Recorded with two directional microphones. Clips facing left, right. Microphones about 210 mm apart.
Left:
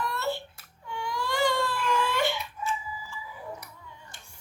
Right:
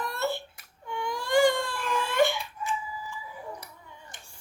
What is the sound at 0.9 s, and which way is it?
Baby cry, 50° right (ahead or behind).